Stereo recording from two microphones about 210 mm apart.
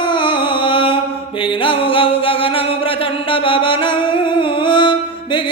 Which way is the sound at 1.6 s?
25° left (ahead or behind).